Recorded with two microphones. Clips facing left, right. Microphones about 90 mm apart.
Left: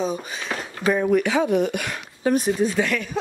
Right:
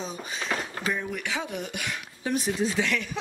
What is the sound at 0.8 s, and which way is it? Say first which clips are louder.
Speech: left 14 dB; 55° left (ahead or behind).